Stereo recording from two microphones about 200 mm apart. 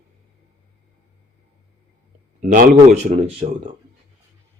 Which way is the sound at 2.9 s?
35° right (ahead or behind).